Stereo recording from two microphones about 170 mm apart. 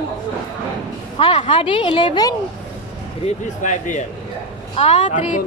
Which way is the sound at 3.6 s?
45° left (ahead or behind).